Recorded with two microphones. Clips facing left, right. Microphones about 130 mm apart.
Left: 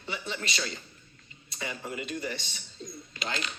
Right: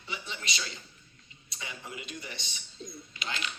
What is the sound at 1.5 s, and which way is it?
A man's voice, 55° left (ahead or behind).